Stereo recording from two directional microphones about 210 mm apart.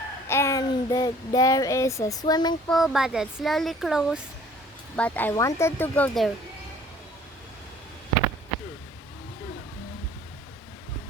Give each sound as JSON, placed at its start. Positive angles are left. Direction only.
{"t": 0.3, "sound": "speech", "side_deg": 10}
{"t": 2.6, "sound": "speech", "side_deg": 0}